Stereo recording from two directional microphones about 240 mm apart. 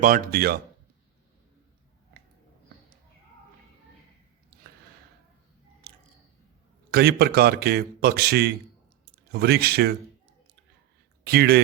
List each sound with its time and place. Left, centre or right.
0.0 s a man's voice: right
5.8 s a sound: right
6.9 s a man's voice: right
11.2 s speech: right